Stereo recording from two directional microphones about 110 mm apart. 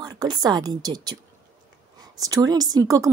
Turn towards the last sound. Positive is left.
turn(degrees=-30)  # may be behind; listen again after turning